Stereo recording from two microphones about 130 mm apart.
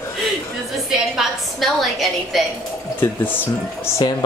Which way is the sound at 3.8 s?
30° left (ahead or behind).